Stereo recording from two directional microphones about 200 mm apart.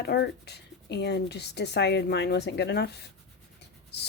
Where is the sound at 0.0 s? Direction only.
55° left (ahead or behind).